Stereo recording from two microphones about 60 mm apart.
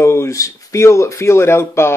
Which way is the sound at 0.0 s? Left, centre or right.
Left.